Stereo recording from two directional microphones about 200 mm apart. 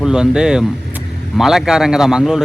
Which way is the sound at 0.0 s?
5° right (ahead or behind).